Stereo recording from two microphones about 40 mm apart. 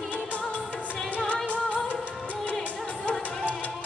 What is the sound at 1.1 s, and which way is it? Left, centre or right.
Music, left.